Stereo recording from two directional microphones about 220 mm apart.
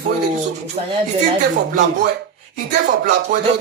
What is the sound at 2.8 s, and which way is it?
Speech, 50° right (ahead or behind).